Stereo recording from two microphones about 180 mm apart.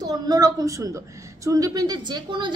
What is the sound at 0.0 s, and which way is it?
A woman's voice, 20° right (ahead or behind).